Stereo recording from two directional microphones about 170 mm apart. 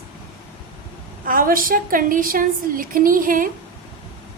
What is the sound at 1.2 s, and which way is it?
A woman's voice, 55° right (ahead or behind).